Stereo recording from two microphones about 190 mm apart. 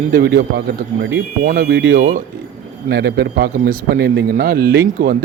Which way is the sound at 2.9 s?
60° right (ahead or behind).